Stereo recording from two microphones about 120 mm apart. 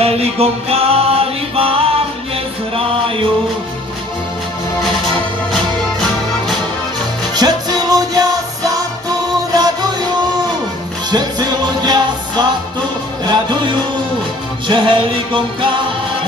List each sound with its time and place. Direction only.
0.0 s music: 55° right (ahead or behind)
5.5 s music: 5° left (ahead or behind)
7.3 s music: 35° right (ahead or behind)
11.1 s music: 35° right (ahead or behind)